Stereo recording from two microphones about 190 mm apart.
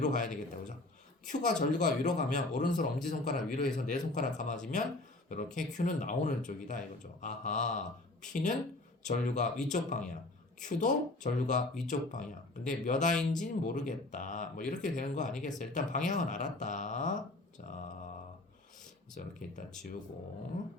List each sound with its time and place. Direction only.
0.0 s speech: 40° left (ahead or behind)
17.7 s mantra: 40° left (ahead or behind)
19.1 s speech: 40° left (ahead or behind)